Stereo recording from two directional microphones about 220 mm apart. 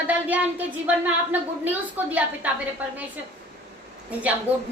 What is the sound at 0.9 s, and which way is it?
Speech, 5° right (ahead or behind).